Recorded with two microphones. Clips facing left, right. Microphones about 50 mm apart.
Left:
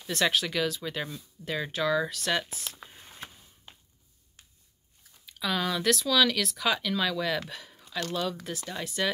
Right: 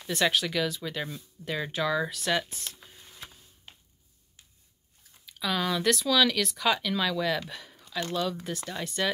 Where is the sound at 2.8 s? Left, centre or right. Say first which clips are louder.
Left 2 dB; left.